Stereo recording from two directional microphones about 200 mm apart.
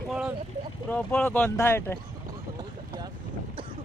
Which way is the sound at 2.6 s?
20° right (ahead or behind).